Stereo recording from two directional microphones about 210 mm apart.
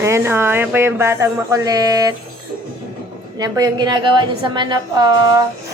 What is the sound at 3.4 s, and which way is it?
A woman's voice, 20° right (ahead or behind).